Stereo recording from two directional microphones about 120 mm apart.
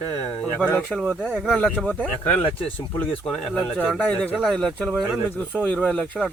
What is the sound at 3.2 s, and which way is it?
Speech, 5° left (ahead or behind).